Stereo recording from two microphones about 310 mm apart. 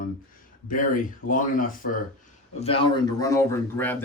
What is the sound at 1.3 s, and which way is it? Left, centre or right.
Speech, left.